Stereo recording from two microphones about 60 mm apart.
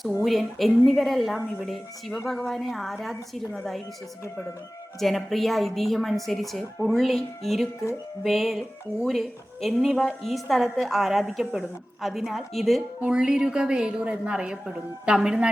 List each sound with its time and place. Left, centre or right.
0.3 s a woman's voice: centre
4.9 s a woman's voice: centre
13.0 s a woman's voice: centre